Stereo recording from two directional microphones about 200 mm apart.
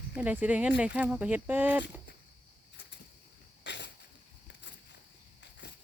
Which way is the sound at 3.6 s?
60° left (ahead or behind).